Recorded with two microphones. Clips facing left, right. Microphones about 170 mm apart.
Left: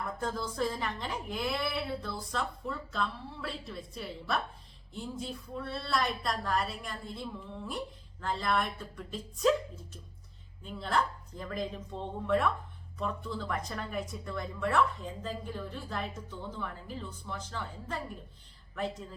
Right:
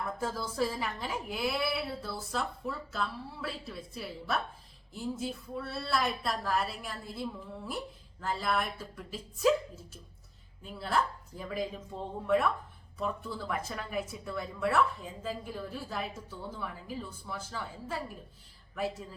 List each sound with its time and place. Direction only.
0.0 s a woman's voice: 5° right (ahead or behind)